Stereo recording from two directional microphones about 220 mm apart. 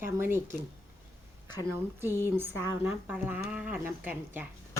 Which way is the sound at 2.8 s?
10° right (ahead or behind).